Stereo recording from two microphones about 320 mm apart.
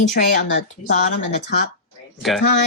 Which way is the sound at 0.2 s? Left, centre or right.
Left.